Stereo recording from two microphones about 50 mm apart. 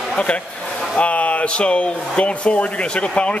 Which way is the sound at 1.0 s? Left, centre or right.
Left.